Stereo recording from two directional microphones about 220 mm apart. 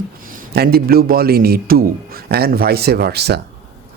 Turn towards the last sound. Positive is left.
turn(degrees=-50)  # may be behind; listen again after turning